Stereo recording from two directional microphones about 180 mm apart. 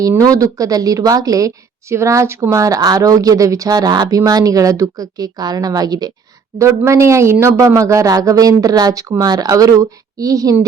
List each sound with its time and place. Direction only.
0.0 s a woman's voice: 20° right (ahead or behind)